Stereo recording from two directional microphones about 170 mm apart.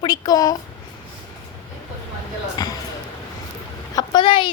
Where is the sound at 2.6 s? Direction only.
20° left (ahead or behind).